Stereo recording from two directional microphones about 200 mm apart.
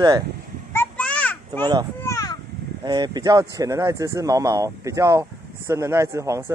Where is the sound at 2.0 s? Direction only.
15° left (ahead or behind).